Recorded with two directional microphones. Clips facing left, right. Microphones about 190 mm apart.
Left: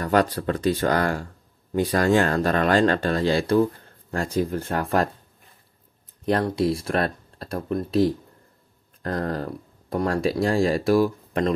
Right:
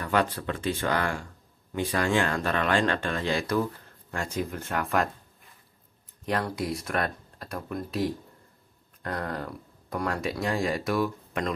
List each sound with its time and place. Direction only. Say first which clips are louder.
0.0 s speech: left 6 dB; 40° left (ahead or behind)
6.2 s speech: left 7 dB; 30° left (ahead or behind)